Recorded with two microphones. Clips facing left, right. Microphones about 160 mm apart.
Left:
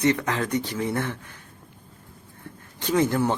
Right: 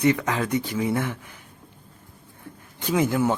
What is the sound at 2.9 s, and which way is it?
Speech, 10° right (ahead or behind).